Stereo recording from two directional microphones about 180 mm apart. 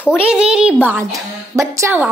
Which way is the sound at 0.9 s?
15° right (ahead or behind).